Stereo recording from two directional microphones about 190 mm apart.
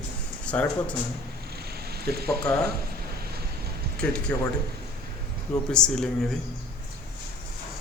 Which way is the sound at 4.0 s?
5° left (ahead or behind).